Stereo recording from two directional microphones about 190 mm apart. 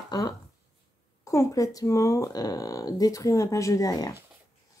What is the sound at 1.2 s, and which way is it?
Speech, 15° left (ahead or behind).